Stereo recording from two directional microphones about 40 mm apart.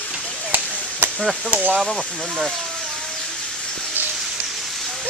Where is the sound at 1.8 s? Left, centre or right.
Centre.